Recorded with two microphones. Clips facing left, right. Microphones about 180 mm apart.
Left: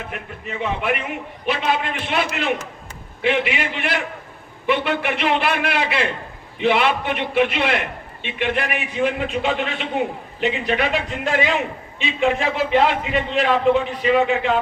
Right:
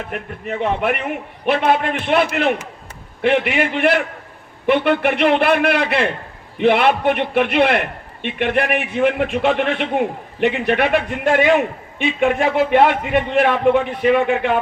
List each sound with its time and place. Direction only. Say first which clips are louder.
0.1 s a man's voice: right 5 dB; 55° right (ahead or behind)